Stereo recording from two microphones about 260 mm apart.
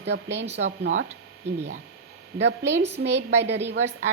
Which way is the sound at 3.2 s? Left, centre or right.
Right.